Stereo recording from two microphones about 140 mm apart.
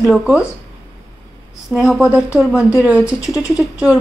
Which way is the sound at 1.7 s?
Centre (ahead or behind).